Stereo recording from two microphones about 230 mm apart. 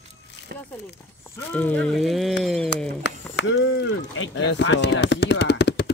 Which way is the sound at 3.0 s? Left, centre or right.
Left.